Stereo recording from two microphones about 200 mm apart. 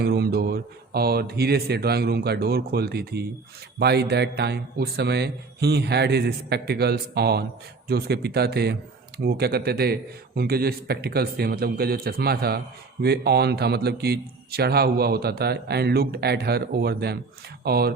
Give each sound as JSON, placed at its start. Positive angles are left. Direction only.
{"t": 0.0, "sound": "speech", "side_deg": -50}